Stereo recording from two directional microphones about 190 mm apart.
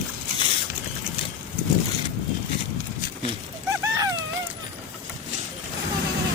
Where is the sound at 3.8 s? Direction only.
20° right (ahead or behind).